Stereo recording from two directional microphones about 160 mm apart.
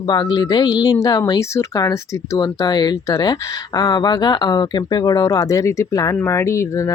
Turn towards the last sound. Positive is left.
turn(degrees=20)  # may be behind; listen again after turning